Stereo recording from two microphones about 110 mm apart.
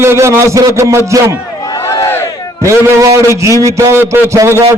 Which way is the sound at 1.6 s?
30° left (ahead or behind).